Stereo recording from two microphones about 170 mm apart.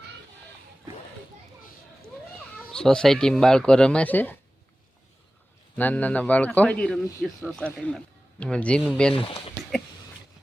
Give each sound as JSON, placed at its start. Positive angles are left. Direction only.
{"t": 2.7, "sound": "speech", "side_deg": 5}
{"t": 5.7, "sound": "a man's voice", "side_deg": 10}
{"t": 9.1, "sound": "speech", "side_deg": 30}